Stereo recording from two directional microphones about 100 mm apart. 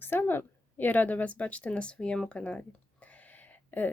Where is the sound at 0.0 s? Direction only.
20° left (ahead or behind).